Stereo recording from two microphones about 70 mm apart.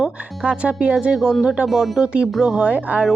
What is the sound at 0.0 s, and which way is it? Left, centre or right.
Speech, centre.